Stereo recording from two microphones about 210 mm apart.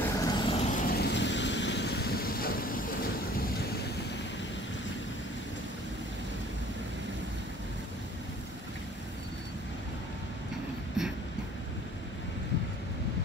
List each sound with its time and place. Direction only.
0.0 s vehicle: 20° left (ahead or behind)
0.8 s vehicle: 50° left (ahead or behind)